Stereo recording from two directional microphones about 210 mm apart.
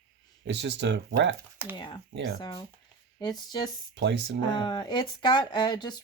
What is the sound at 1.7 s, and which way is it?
Speech, 20° left (ahead or behind).